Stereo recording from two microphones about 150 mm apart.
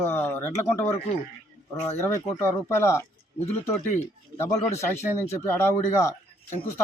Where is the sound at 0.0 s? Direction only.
15° left (ahead or behind).